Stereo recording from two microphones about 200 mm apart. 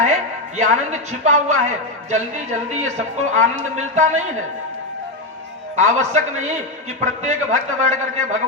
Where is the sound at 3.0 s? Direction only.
35° right (ahead or behind).